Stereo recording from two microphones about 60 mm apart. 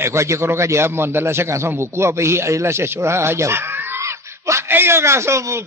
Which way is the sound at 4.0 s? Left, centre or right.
Right.